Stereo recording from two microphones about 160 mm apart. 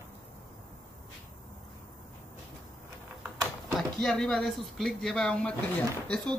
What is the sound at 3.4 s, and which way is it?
Speech, centre (ahead or behind).